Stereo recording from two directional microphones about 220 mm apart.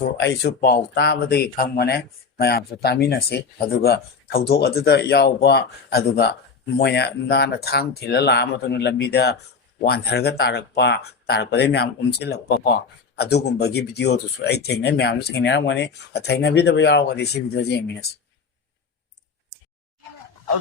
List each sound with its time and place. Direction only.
0.2 s speech: 50° left (ahead or behind)